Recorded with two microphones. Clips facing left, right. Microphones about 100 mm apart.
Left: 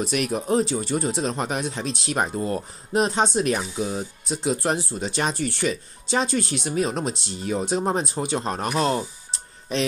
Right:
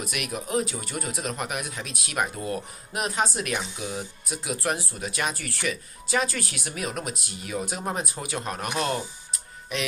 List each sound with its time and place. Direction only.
0.0 s speech: 30° left (ahead or behind)